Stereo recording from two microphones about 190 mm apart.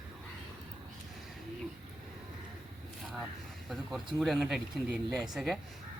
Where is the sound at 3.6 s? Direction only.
Centre (ahead or behind).